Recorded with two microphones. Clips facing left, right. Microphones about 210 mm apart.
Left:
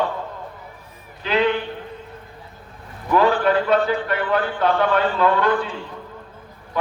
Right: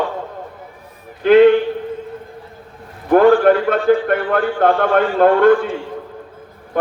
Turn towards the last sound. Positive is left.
turn(degrees=-50)  # may be behind; listen again after turning